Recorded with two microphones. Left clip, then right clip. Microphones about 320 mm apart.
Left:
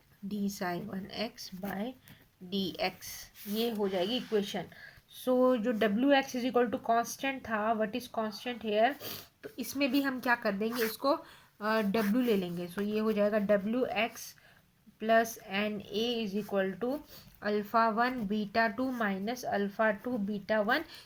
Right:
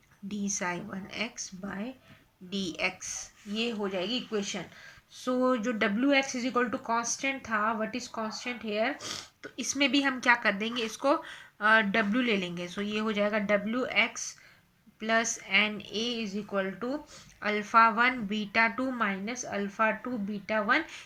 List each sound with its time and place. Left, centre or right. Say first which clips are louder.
0.3 s speech: right 3 dB; centre
11.7 s speech: right 7 dB; right
12.1 s speech: right 1 dB; centre